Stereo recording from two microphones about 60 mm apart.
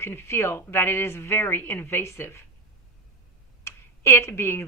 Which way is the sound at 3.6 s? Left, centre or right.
Left.